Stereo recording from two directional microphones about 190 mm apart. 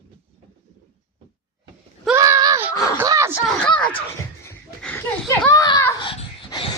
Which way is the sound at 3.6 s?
5° left (ahead or behind).